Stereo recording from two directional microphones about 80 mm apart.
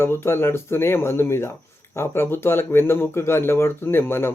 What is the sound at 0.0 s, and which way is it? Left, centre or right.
Speech, left.